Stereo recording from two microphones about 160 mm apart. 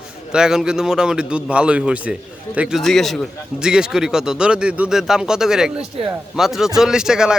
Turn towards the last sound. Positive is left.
turn(degrees=-5)  # may be behind; listen again after turning